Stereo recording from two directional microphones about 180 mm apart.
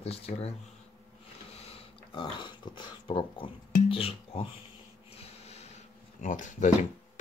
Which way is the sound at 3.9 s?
30° left (ahead or behind).